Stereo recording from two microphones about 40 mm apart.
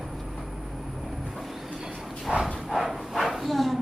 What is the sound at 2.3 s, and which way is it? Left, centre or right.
Clip-clop, centre.